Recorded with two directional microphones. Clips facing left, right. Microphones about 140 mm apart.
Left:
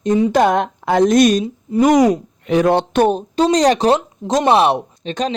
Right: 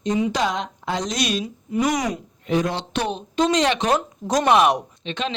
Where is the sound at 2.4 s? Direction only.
65° left (ahead or behind); by 3.2 s 50° left (ahead or behind).